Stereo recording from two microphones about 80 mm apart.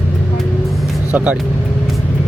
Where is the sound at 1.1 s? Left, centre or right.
Centre.